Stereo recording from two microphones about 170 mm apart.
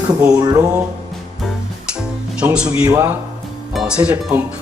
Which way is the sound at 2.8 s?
20° right (ahead or behind).